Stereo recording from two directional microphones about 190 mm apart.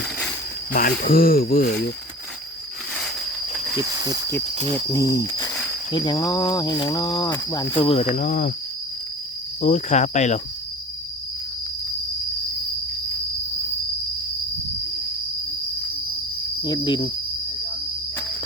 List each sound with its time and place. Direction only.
0.7 s speech: 50° left (ahead or behind)
3.8 s speech: 15° right (ahead or behind)
4.5 s speech: 30° right (ahead or behind)
4.9 s speech: 15° left (ahead or behind); by 8.5 s 40° left (ahead or behind)
9.6 s cricket: 40° left (ahead or behind)
16.6 s speech: 25° left (ahead or behind)